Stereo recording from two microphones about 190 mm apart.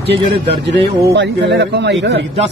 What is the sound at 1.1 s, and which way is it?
A man's voice, 65° right (ahead or behind).